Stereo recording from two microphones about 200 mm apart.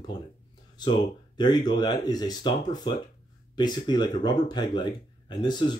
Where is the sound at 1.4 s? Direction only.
20° left (ahead or behind).